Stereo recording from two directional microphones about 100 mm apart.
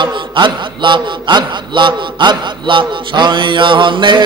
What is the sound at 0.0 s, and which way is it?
A man's voice, 50° right (ahead or behind).